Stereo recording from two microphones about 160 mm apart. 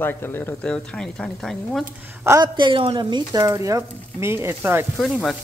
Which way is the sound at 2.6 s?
30° right (ahead or behind).